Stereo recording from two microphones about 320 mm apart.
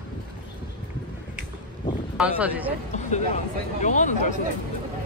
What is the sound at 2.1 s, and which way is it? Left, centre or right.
Speech, centre.